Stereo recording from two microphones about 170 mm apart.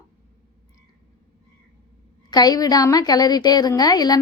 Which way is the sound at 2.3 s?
25° left (ahead or behind).